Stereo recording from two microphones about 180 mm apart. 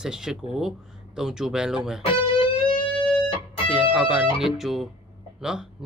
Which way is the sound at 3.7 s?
5° right (ahead or behind).